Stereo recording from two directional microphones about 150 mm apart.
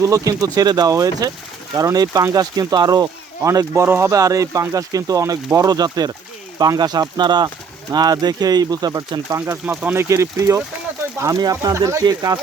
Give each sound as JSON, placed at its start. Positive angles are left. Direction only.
{"t": 0.0, "sound": "speech", "side_deg": -20}